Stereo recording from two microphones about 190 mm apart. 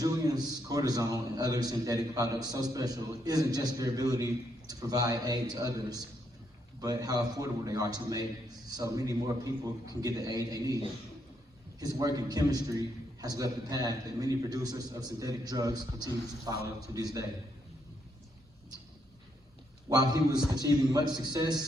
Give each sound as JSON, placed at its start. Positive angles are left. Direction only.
{"t": 0.0, "sound": "a man's voice", "side_deg": -20}
{"t": 11.8, "sound": "a man's voice", "side_deg": -20}
{"t": 19.9, "sound": "a man's voice", "side_deg": -20}